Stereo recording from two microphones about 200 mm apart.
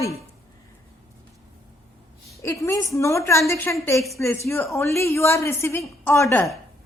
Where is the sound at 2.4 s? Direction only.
15° left (ahead or behind).